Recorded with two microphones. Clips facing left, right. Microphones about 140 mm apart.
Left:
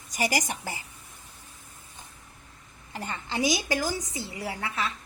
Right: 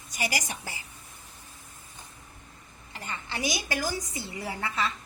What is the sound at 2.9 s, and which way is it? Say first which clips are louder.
Speech: left 4 dB; 45° left (ahead or behind).